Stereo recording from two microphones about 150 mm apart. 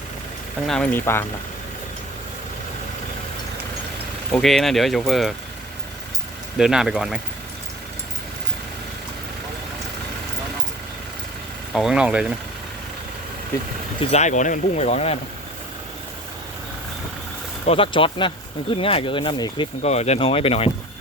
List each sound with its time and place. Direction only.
0.7 s speech: 10° left (ahead or behind)
4.3 s speech: 5° left (ahead or behind)
6.6 s speech: 5° right (ahead or behind)
11.7 s speech: centre (ahead or behind)
14.0 s speech: 45° left (ahead or behind)
17.7 s speech: 35° left (ahead or behind)
19.8 s speech: 45° left (ahead or behind)